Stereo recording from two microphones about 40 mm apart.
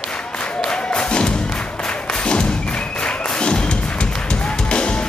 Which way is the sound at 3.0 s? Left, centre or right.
Left.